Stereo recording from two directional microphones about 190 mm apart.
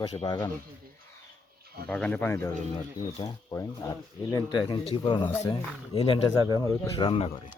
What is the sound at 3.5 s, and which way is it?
Speech, 20° left (ahead or behind).